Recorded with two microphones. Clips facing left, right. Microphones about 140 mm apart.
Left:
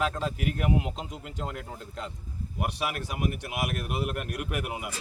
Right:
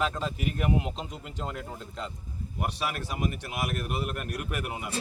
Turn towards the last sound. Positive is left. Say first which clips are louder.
# left 1 dB
turn(degrees=10)  # may be behind; listen again after turning